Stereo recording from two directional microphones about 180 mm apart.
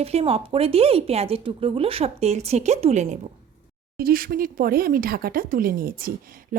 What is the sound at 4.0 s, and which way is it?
Speech, 55° right (ahead or behind).